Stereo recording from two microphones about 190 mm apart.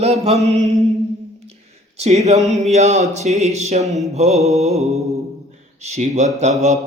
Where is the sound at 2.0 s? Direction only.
35° right (ahead or behind).